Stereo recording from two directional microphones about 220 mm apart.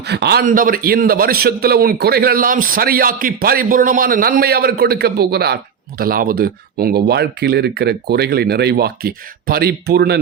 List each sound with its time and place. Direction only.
0.1 s a man's voice: 50° right (ahead or behind)